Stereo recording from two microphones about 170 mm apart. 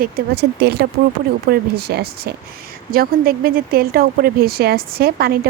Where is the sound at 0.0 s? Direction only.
70° right (ahead or behind).